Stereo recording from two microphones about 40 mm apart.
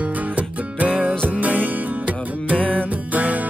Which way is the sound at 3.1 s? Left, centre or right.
Right.